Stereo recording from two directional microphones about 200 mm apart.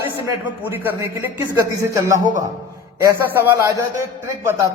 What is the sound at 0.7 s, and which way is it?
A man's voice, 10° right (ahead or behind).